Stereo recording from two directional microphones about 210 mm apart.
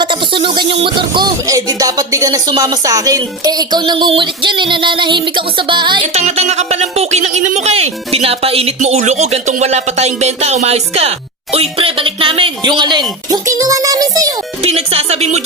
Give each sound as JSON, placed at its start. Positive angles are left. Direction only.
{"t": 0.0, "sound": "music", "side_deg": -25}
{"t": 0.7, "sound": "speech", "side_deg": -25}
{"t": 14.6, "sound": "speech", "side_deg": -30}